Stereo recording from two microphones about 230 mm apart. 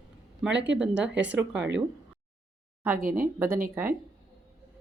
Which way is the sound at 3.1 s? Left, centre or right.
Centre.